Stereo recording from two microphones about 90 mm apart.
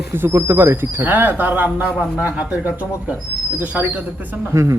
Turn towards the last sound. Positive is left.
turn(degrees=-35)  # may be behind; listen again after turning